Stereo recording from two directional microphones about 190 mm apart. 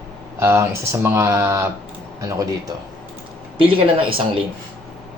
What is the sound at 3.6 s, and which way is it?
Speech, 30° right (ahead or behind).